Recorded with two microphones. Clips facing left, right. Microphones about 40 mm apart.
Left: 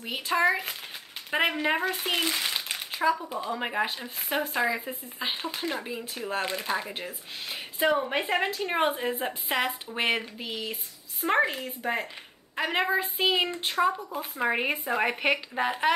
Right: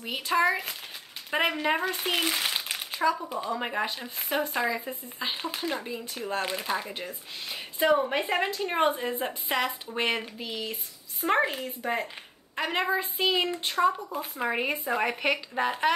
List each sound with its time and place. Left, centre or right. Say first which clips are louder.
0.0 s speech: even; centre
2.0 s crumpling: even; centre
3.2 s speech: even; centre